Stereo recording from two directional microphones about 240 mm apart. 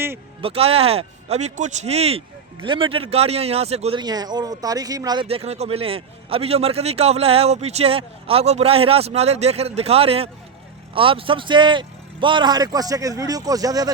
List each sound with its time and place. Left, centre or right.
0.4 s speech: right